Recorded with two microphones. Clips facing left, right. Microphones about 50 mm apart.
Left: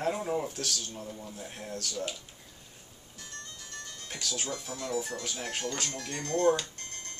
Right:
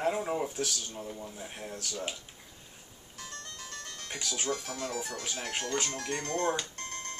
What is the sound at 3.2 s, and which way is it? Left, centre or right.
Music, right.